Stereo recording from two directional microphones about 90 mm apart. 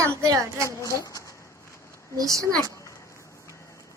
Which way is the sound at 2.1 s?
40° right (ahead or behind).